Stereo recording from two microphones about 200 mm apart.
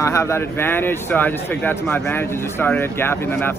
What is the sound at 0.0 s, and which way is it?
Speech, 15° left (ahead or behind).